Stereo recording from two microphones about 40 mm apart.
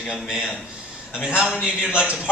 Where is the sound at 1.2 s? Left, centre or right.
Centre.